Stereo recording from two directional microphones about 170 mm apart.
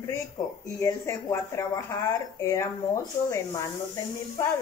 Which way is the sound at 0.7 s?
15° left (ahead or behind).